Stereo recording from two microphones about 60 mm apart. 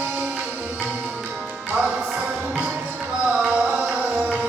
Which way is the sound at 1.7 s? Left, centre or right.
Right.